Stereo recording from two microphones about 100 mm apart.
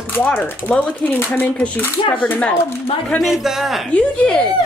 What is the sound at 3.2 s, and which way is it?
Speech, centre (ahead or behind).